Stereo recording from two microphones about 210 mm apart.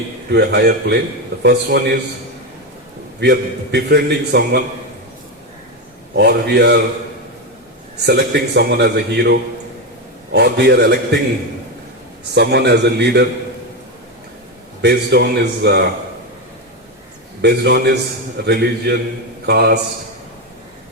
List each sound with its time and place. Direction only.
0.3 s a man's voice: 50° right (ahead or behind)
3.2 s a man's voice: 50° right (ahead or behind)
6.1 s a man's voice: 50° right (ahead or behind)
8.0 s a man's voice: 50° right (ahead or behind)
12.3 s a man's voice: 50° right (ahead or behind)
14.8 s a man's voice: 50° right (ahead or behind)
17.4 s a man's voice: 50° right (ahead or behind)